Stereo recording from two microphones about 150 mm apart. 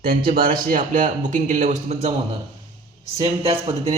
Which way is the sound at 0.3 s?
65° right (ahead or behind).